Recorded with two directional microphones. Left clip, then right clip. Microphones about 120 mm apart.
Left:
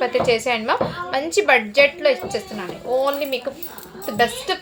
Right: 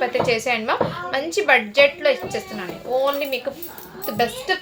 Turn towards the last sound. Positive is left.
turn(degrees=30)  # may be behind; listen again after turning